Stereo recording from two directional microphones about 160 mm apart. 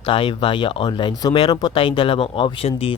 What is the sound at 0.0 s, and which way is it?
Speech, 30° left (ahead or behind).